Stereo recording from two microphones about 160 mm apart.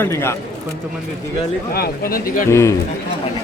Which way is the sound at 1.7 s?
70° left (ahead or behind).